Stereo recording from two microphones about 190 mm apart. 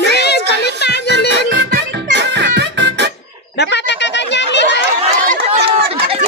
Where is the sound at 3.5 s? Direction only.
65° left (ahead or behind).